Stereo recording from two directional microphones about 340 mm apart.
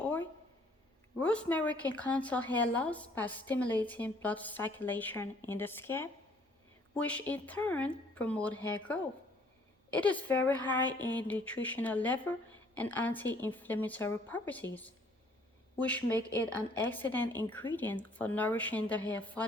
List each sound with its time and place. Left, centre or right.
0.0 s a sound: centre
1.2 s speech: centre
10.8 s speech: centre
11.3 s speech: centre
15.7 s speech: centre
16.1 s speech: centre
16.6 s speech: centre